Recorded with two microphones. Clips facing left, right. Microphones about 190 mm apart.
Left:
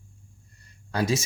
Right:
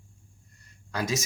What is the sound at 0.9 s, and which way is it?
Speech, 30° left (ahead or behind).